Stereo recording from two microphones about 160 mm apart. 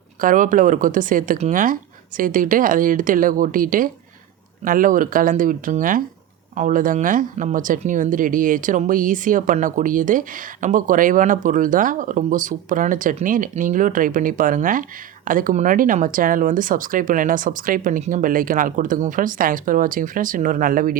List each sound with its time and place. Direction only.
0.2 s speech: 55° right (ahead or behind)